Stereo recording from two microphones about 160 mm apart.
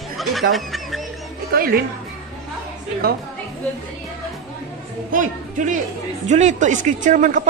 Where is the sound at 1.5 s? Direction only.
65° right (ahead or behind).